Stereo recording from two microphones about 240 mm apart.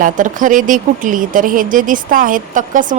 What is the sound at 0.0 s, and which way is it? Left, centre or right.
A woman's voice, right.